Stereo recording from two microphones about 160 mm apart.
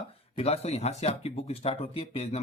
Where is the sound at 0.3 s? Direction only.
40° left (ahead or behind).